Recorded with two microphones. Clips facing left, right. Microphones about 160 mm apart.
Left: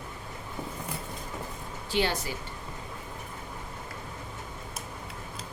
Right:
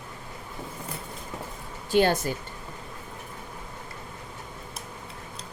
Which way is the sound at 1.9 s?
50° right (ahead or behind).